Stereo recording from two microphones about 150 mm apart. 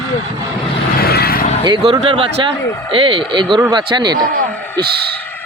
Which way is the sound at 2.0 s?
35° right (ahead or behind).